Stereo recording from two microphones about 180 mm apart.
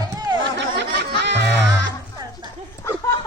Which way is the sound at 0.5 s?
70° right (ahead or behind).